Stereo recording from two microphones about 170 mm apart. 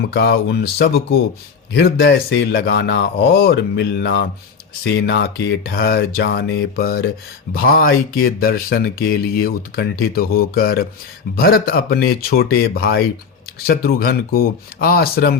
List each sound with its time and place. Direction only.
0.1 s speech: 75° left (ahead or behind)
1.7 s speech: 85° left; by 15.4 s 65° left (ahead or behind)